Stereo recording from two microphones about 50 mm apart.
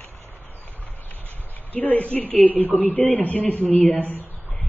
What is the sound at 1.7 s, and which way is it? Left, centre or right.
Speech, left.